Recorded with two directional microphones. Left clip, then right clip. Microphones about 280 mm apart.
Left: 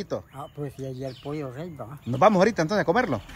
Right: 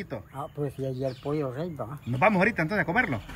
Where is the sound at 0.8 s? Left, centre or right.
Centre.